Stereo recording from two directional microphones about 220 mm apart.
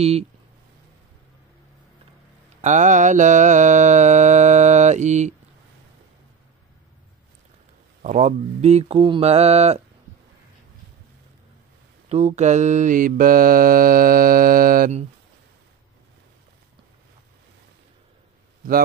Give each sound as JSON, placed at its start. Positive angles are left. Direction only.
{"t": 2.6, "sound": "mantra", "side_deg": -35}
{"t": 8.0, "sound": "mantra", "side_deg": -35}
{"t": 12.1, "sound": "mantra", "side_deg": -30}